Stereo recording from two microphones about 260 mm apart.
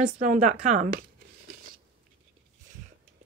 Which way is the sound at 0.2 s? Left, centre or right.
Right.